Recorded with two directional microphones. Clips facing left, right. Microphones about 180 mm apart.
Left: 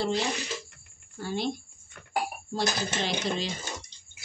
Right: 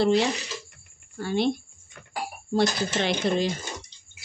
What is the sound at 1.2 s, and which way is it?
Speech, 65° right (ahead or behind).